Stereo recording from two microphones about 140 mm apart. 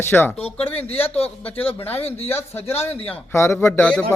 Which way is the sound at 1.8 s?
15° left (ahead or behind).